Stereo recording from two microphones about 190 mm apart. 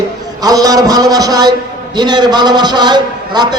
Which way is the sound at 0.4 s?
20° right (ahead or behind).